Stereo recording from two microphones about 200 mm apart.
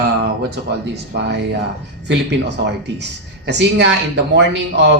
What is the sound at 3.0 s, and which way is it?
Speech, 60° right (ahead or behind).